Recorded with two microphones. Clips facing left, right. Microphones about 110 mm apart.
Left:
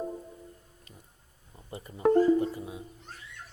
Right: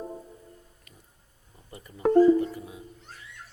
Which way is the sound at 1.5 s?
25° left (ahead or behind).